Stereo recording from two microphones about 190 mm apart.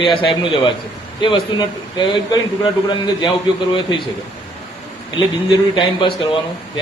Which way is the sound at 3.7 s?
25° left (ahead or behind).